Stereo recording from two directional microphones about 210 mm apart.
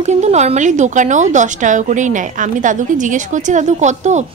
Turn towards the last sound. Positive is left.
turn(degrees=-35)  # may be behind; listen again after turning